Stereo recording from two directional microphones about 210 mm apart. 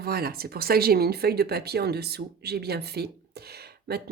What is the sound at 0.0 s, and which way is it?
Speech, 45° right (ahead or behind).